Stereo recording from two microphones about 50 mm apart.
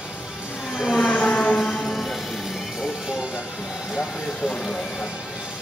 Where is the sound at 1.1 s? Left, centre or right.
Left.